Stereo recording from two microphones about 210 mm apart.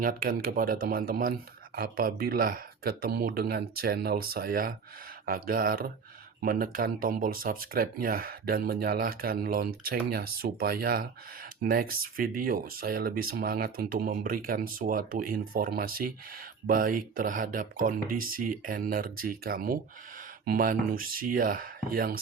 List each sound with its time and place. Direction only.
0.0 s speech: 40° right (ahead or behind)